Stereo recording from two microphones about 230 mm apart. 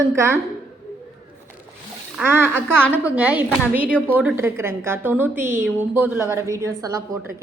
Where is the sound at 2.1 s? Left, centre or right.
Centre.